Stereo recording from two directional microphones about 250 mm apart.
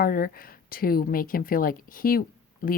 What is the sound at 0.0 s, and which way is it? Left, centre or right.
A woman's voice, left.